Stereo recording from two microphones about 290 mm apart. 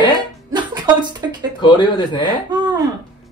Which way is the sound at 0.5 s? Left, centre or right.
Centre.